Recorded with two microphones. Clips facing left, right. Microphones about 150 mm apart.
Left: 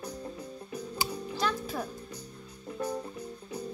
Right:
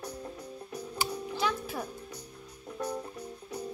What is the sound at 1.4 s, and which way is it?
Music, 10° right (ahead or behind).